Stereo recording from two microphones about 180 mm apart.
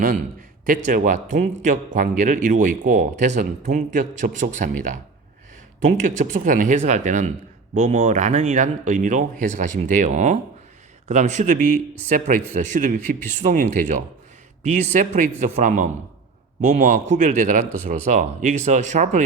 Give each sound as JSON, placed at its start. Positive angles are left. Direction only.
{"t": 0.9, "sound": "speech", "side_deg": -45}